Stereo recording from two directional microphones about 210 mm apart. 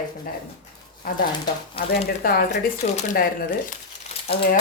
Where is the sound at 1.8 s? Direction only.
25° left (ahead or behind).